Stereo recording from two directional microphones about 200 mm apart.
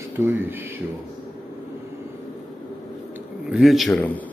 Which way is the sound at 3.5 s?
Centre (ahead or behind).